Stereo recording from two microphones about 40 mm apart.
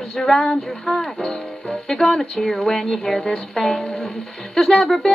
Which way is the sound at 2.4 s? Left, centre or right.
Centre.